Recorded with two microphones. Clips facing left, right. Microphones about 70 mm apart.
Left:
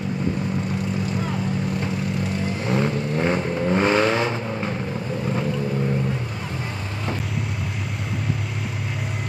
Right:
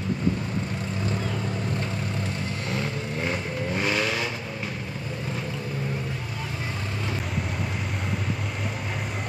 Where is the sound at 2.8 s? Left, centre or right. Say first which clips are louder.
Left 8 dB; left.